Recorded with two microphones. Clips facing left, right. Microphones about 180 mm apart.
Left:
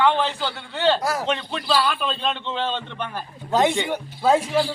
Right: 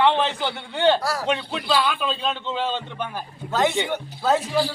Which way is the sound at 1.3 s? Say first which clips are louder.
Right 1 dB; 10° right (ahead or behind).